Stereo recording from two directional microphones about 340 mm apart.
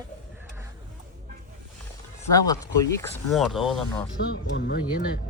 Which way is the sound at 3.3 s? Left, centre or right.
Centre.